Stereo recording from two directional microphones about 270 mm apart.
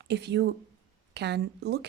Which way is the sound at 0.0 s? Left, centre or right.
Right.